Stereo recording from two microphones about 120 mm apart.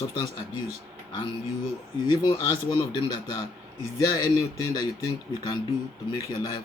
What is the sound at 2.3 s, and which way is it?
A man's voice, 35° left (ahead or behind).